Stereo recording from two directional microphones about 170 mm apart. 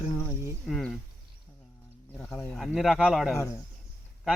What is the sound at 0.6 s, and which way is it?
Speech, centre (ahead or behind).